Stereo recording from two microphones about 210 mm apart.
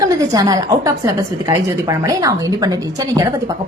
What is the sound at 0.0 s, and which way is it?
A woman's voice, 15° right (ahead or behind).